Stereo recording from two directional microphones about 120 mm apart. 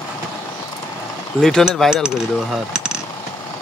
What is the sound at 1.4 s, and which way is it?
Speech, 5° left (ahead or behind).